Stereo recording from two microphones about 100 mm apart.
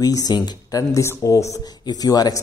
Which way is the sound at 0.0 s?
40° left (ahead or behind).